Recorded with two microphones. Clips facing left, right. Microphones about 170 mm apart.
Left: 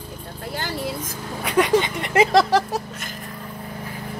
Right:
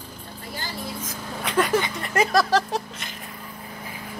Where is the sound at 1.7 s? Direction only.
20° left (ahead or behind).